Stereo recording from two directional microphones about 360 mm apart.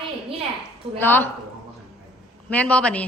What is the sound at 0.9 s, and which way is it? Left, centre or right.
Speech, centre.